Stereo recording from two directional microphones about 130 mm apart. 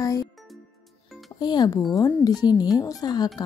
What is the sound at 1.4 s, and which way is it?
A woman's voice, 30° left (ahead or behind).